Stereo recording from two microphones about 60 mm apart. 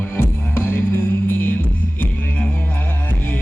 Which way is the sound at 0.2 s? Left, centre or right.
Left.